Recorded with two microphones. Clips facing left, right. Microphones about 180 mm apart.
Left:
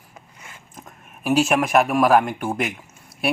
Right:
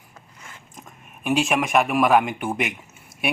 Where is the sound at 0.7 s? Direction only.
Centre (ahead or behind).